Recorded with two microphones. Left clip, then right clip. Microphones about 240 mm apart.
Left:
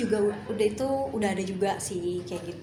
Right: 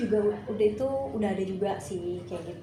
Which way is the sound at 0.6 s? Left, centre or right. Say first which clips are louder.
Even; left.